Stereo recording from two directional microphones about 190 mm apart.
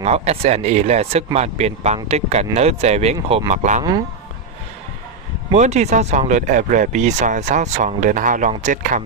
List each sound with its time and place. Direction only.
0.0 s speech: 35° right (ahead or behind)
5.5 s speech: 35° right (ahead or behind)